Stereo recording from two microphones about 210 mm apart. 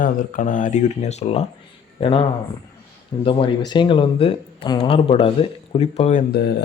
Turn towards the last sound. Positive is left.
turn(degrees=50)  # may be behind; listen again after turning